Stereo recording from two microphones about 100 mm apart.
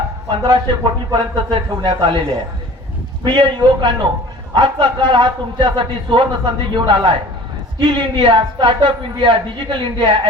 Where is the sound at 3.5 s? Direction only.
50° right (ahead or behind).